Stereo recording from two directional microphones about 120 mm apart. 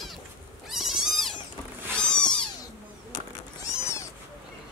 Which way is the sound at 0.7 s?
Centre (ahead or behind).